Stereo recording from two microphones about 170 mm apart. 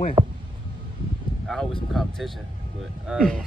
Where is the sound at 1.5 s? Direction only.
5° left (ahead or behind).